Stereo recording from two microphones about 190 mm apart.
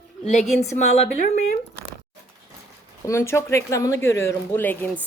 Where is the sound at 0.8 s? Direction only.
35° left (ahead or behind).